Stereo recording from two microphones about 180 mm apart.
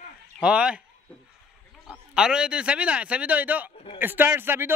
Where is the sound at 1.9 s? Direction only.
5° right (ahead or behind).